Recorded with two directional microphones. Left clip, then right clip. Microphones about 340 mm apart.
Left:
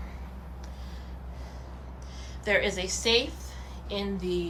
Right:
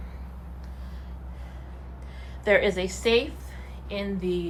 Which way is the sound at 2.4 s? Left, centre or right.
Centre.